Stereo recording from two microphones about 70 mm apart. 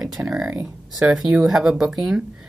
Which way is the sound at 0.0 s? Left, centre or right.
Centre.